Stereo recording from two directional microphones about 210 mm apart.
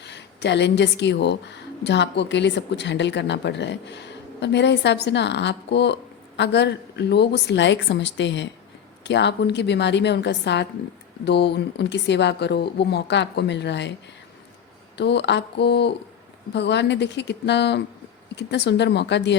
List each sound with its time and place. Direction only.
0.0 s a woman's voice: 55° left (ahead or behind)
14.9 s a woman's voice: 55° left (ahead or behind)